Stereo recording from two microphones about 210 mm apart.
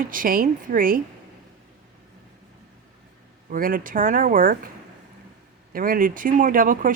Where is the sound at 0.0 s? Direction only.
40° right (ahead or behind).